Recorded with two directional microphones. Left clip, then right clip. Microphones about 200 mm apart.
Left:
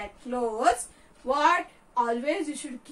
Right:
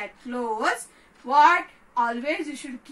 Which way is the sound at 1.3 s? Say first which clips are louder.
Right 6 dB; 25° left (ahead or behind).